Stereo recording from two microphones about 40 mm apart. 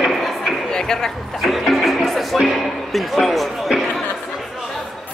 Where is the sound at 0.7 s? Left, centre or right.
Centre.